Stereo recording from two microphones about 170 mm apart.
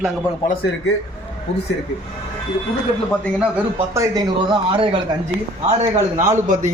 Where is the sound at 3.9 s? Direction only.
20° right (ahead or behind).